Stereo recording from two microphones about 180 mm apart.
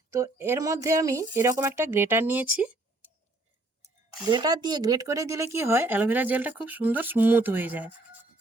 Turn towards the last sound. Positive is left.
turn(degrees=-10)  # may be behind; listen again after turning